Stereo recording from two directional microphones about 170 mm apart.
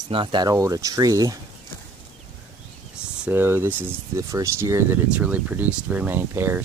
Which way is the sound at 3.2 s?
10° right (ahead or behind).